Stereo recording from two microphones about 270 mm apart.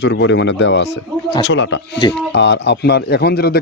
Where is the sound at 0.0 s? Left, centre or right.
Left.